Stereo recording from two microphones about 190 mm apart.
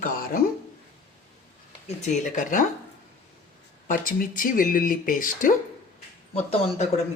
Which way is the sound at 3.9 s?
45° left (ahead or behind).